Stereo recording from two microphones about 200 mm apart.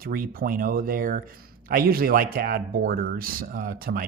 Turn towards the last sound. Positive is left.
turn(degrees=-50)  # may be behind; listen again after turning